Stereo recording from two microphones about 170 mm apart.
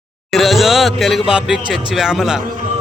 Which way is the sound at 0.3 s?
Centre (ahead or behind).